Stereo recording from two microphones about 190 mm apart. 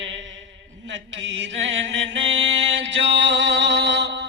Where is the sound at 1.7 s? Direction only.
80° right.